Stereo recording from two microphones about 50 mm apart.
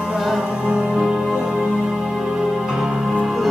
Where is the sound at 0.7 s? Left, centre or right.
Centre.